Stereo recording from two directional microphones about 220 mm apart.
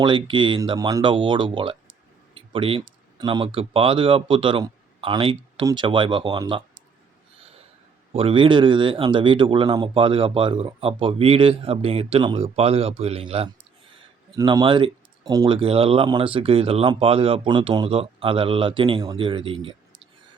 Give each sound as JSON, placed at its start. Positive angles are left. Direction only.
{"t": 0.0, "sound": "speech", "side_deg": -20}
{"t": 7.3, "sound": "snort", "side_deg": -25}
{"t": 8.1, "sound": "speech", "side_deg": -25}